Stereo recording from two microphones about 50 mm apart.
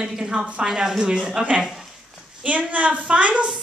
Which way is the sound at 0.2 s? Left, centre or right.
Right.